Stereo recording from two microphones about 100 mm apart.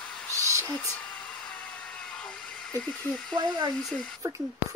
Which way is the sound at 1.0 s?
10° left (ahead or behind).